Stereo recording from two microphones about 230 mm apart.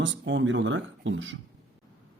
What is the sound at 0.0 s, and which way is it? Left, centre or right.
A man's voice, right.